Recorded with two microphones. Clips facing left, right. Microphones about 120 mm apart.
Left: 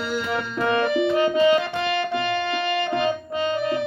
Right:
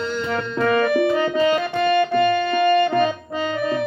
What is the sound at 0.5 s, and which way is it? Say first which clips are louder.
Music: right 3 dB; 15° left (ahead or behind).